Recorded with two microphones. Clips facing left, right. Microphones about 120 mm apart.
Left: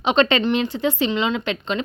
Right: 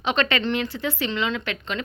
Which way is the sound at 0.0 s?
20° left (ahead or behind).